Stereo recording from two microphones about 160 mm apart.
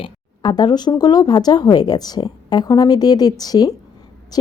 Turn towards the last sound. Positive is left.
turn(degrees=25)  # may be behind; listen again after turning